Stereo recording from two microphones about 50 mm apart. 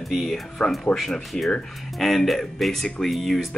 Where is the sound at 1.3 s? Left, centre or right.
Centre.